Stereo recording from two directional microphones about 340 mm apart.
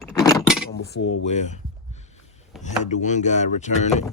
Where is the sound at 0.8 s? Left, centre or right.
Left.